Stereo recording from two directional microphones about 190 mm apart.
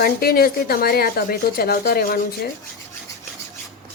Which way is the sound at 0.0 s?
50° left (ahead or behind).